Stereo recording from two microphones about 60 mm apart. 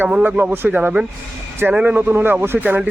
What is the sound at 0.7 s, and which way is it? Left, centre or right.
Speech, centre.